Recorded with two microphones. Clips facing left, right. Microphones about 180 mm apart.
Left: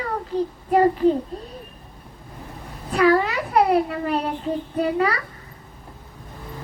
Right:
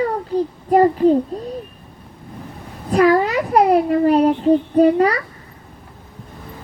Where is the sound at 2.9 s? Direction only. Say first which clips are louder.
Right 4 dB; 40° right (ahead or behind).